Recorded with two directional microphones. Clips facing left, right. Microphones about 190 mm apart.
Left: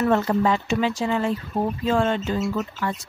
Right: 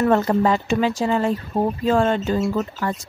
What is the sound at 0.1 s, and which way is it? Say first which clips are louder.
Speech: right 3 dB; 45° right (ahead or behind).